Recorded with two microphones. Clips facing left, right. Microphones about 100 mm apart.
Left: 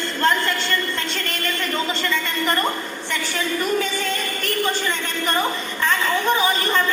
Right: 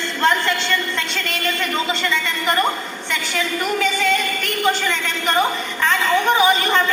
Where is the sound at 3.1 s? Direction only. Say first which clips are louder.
Right 2 dB; 60° right (ahead or behind).